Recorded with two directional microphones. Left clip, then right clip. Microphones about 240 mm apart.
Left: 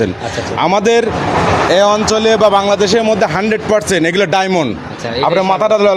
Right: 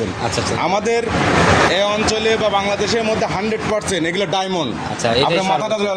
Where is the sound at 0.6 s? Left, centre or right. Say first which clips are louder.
Left 8 dB; left.